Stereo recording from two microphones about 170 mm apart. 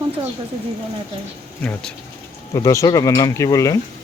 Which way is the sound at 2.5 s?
20° left (ahead or behind).